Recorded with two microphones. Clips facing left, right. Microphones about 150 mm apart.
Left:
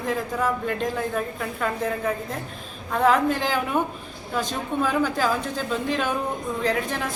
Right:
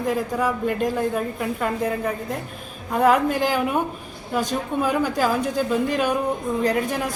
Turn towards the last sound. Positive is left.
turn(degrees=-10)  # may be behind; listen again after turning